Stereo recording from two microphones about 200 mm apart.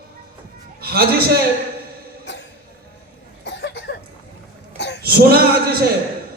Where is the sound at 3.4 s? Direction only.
60° left (ahead or behind).